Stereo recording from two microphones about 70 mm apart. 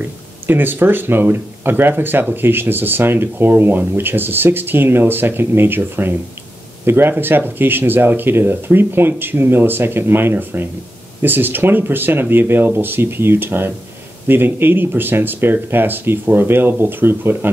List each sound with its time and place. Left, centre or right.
0.5 s speech: right